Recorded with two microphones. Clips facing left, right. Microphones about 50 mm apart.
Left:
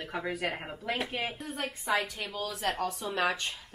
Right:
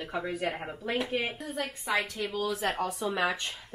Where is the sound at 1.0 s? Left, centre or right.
Centre.